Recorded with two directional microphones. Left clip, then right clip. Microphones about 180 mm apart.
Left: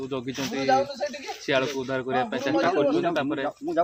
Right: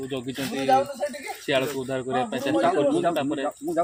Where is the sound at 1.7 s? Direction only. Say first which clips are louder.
Even; 10° right (ahead or behind).